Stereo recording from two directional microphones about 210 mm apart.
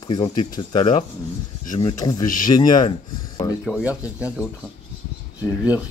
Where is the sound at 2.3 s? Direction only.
40° left (ahead or behind).